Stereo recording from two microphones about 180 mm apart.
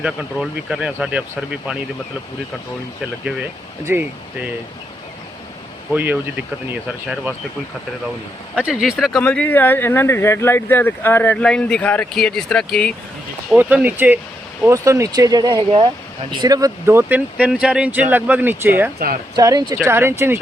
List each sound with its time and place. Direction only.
0.0 s speech: 5° right (ahead or behind)
3.8 s speech: 10° right (ahead or behind)
5.9 s speech: 10° right (ahead or behind)
8.5 s speech: 5° right (ahead or behind)
13.5 s speech: 5° right (ahead or behind)